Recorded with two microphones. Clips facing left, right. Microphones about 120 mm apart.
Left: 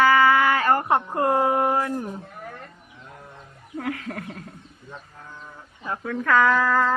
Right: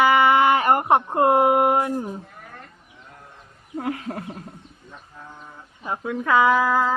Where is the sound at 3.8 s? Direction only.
25° right (ahead or behind).